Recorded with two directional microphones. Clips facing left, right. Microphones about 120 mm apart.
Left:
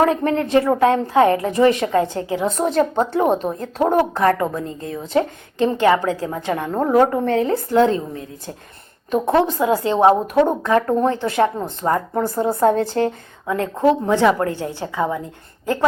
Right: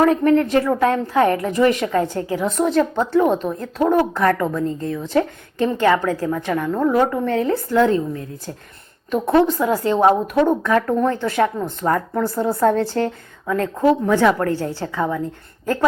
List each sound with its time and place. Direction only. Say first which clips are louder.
0.0 s speech: right 3 dB; 30° left (ahead or behind)
2.6 s a woman's voice: left 1 dB; 45° left (ahead or behind)
3.2 s speech: even; 20° left (ahead or behind)
3.8 s speech: even; 30° left (ahead or behind)
11.3 s speech: left 1 dB; 35° left (ahead or behind); by 15.2 s 15° left (ahead or behind)